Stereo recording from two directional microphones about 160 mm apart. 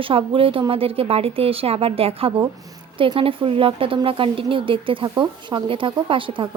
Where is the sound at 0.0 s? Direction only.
35° right (ahead or behind).